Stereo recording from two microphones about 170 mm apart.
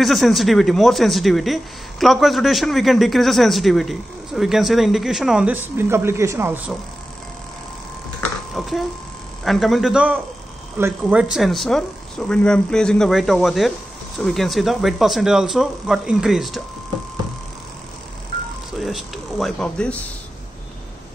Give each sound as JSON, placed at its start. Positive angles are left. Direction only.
{"t": 0.0, "sound": "speech", "side_deg": 0}
{"t": 8.2, "sound": "a sound", "side_deg": 0}
{"t": 9.4, "sound": "speech", "side_deg": 0}
{"t": 18.7, "sound": "speech", "side_deg": 0}